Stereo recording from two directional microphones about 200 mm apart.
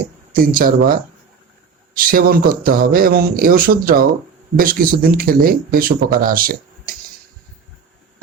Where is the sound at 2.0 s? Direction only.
45° right (ahead or behind).